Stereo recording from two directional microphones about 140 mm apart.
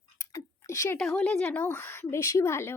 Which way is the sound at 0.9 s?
10° left (ahead or behind).